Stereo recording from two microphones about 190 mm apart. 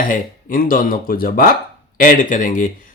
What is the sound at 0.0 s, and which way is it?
Speech, 45° left (ahead or behind).